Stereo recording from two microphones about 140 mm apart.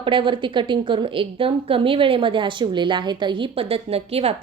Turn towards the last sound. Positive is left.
turn(degrees=-45)  # may be behind; listen again after turning